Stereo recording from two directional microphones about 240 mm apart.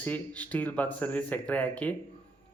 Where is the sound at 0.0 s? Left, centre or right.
Centre.